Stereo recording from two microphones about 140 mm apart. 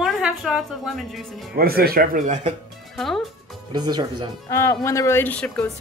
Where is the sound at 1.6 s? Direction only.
90° right; by 2.5 s 55° right (ahead or behind).